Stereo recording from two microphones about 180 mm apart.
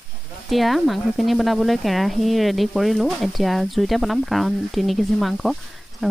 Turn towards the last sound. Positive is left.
turn(degrees=0)  # may be behind; listen again after turning